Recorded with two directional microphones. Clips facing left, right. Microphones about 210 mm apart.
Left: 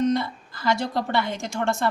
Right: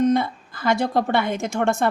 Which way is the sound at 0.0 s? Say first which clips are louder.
Right 4 dB; 55° right (ahead or behind).